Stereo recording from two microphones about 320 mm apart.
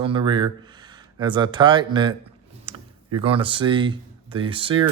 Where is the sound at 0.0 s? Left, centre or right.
Centre.